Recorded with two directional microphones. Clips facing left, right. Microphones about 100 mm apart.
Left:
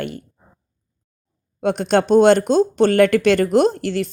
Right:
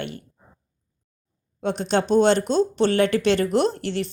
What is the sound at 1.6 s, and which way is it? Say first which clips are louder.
Speech: left 5 dB; 55° left (ahead or behind).